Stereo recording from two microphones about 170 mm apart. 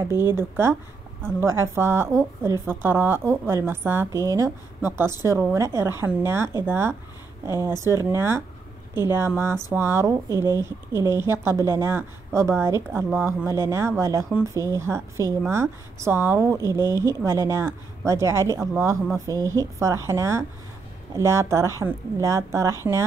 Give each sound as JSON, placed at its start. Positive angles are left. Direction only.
{"t": 0.4, "sound": "speech", "side_deg": -15}